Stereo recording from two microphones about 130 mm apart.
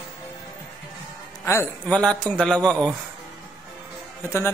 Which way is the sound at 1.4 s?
20° left (ahead or behind).